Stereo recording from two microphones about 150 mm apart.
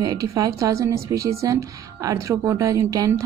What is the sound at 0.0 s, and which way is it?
A woman's voice, 25° right (ahead or behind).